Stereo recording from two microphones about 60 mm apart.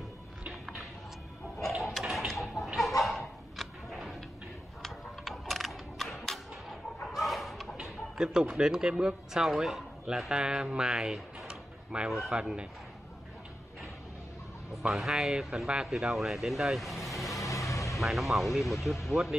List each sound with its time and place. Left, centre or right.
0.4 s music: centre
1.6 s a sound: centre
3.0 s dog: centre
4.8 s a sound: centre
7.1 s chicken: centre
7.7 s speech: centre
11.4 s tick-tock: centre
12.3 s speech: centre
14.8 s speech: centre
17.3 s music: left
17.9 s speech: centre